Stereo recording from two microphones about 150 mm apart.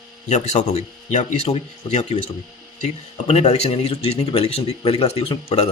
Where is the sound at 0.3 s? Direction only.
50° left (ahead or behind).